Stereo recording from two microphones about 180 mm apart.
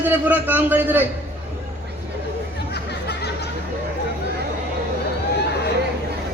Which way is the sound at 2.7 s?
65° left (ahead or behind).